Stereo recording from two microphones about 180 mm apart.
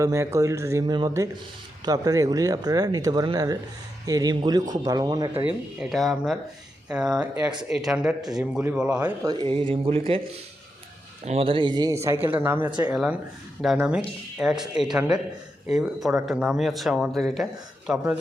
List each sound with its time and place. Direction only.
0.0 s speech: 15° right (ahead or behind)
5.4 s speech: 5° right (ahead or behind)
9.2 s speech: 25° right (ahead or behind)
11.3 s speech: 30° right (ahead or behind)
12.0 s speech: 15° right (ahead or behind)